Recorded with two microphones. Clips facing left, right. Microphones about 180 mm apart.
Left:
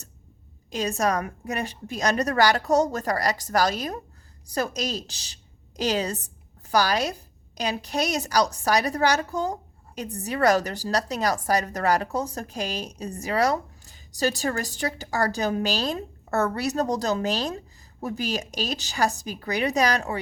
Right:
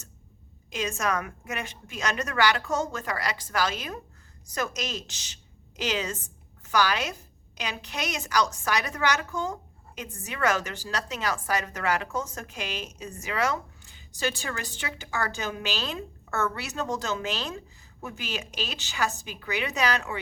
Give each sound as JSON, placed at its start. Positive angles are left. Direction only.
{"t": 0.7, "sound": "a woman's voice", "side_deg": 35}